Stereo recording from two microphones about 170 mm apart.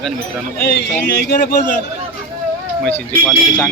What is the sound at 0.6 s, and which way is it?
Speech, 60° left (ahead or behind).